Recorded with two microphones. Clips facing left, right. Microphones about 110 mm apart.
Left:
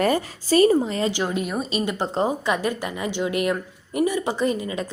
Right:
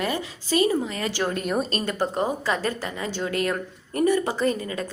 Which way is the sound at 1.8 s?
15° left (ahead or behind).